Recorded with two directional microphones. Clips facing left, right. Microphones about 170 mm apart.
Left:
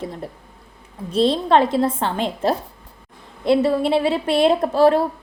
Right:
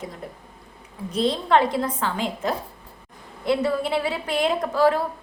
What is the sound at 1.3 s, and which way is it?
Speech, 25° left (ahead or behind).